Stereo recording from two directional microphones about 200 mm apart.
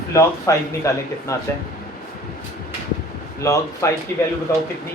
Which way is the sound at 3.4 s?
15° left (ahead or behind).